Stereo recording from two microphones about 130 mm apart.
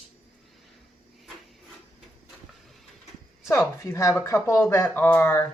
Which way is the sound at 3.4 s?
20° left (ahead or behind).